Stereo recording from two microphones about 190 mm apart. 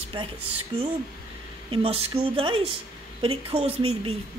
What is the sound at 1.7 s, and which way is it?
A woman's voice, 30° right (ahead or behind).